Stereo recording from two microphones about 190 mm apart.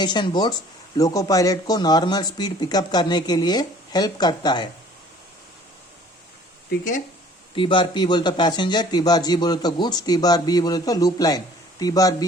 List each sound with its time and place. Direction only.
0.0 s a man's voice: 25° left (ahead or behind)
7.5 s a man's voice: 25° left (ahead or behind)